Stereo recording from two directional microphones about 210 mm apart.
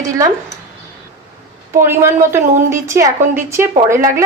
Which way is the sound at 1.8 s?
10° right (ahead or behind).